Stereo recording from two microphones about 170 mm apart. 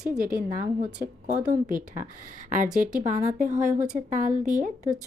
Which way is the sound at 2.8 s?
50° right (ahead or behind).